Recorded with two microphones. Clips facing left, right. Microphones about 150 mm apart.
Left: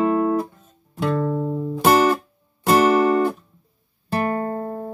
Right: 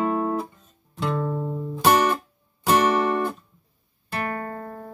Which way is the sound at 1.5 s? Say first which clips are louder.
Left 5 dB; 30° left (ahead or behind).